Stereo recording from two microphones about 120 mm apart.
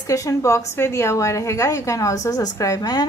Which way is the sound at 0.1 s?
25° left (ahead or behind).